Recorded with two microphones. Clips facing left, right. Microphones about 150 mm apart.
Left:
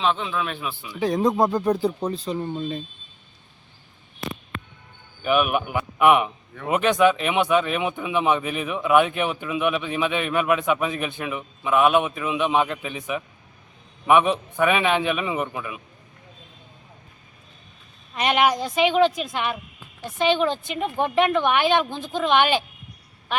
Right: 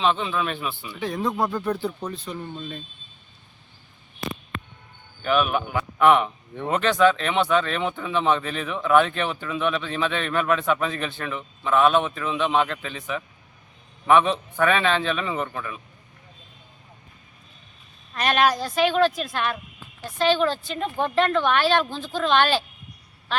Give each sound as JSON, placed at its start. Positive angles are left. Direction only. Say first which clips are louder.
{"t": 0.0, "sound": "speech", "louder": "right 1 dB", "side_deg": 0}
{"t": 0.9, "sound": "speech", "louder": "left 6 dB", "side_deg": 35}
{"t": 5.2, "sound": "speech", "louder": "left 1 dB", "side_deg": 10}
{"t": 18.1, "sound": "speech", "louder": "left 1 dB", "side_deg": 15}